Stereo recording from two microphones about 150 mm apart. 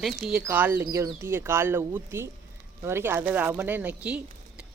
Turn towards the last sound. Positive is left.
turn(degrees=-10)  # may be behind; listen again after turning